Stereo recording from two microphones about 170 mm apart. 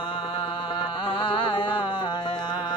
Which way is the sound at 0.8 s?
30° left (ahead or behind).